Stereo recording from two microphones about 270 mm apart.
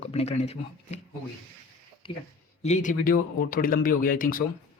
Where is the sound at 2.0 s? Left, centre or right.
Centre.